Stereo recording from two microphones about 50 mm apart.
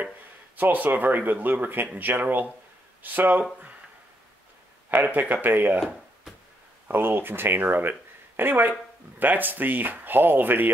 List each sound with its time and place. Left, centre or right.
0.6 s speech: right
4.9 s speech: right
6.9 s speech: right